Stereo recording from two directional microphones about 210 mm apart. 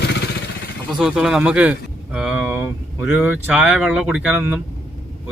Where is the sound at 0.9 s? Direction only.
5° right (ahead or behind).